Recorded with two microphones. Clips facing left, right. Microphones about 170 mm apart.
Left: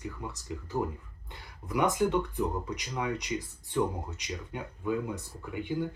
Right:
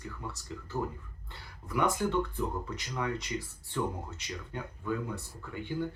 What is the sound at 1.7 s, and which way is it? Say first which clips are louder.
Speech: left 3 dB; 15° left (ahead or behind).